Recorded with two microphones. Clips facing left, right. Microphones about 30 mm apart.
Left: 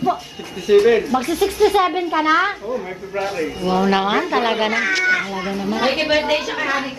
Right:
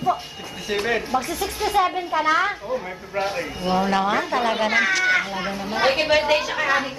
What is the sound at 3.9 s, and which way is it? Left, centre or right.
Speech, left.